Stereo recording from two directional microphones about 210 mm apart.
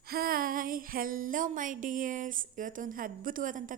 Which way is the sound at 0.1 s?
45° right (ahead or behind).